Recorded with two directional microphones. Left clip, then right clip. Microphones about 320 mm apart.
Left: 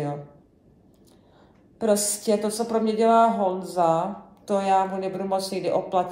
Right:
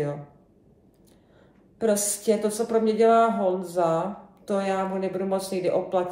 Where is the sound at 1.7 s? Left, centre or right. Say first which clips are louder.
Left 1 dB; centre.